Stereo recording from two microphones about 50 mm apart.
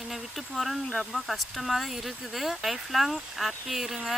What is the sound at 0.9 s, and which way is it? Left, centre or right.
Speech, centre.